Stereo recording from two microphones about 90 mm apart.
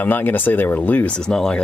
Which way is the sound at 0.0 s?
20° left (ahead or behind).